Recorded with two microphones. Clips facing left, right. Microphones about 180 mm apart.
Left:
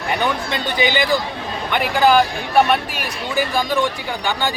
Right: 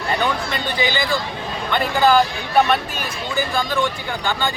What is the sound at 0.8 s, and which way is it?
A man's voice, 20° left (ahead or behind).